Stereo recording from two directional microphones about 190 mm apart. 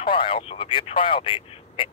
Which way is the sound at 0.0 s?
25° left (ahead or behind).